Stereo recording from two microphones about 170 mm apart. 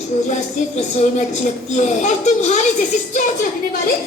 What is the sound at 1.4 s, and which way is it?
A child's voice, 40° left (ahead or behind).